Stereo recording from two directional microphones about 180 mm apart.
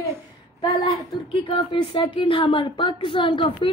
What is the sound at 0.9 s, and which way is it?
Speech, 25° left (ahead or behind).